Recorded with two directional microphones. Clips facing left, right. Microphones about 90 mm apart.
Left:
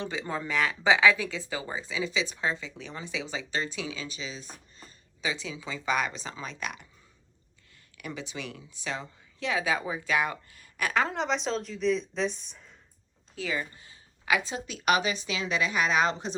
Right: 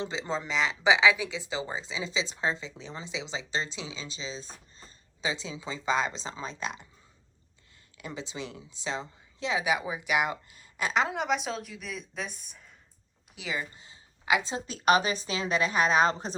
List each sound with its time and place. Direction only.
0.0 s speech: 25° right (ahead or behind)
7.9 s speech: 25° right (ahead or behind)
11.1 s a woman's voice: 5° right (ahead or behind)
13.3 s a woman's voice: 15° right (ahead or behind); by 16.3 s 40° right (ahead or behind)